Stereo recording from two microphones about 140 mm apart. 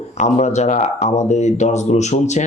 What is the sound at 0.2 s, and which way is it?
Speech, 55° left (ahead or behind).